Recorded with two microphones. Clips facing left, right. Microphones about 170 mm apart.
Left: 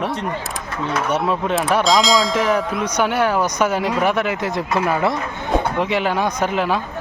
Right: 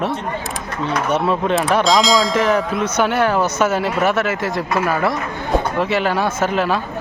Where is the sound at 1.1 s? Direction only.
10° left (ahead or behind).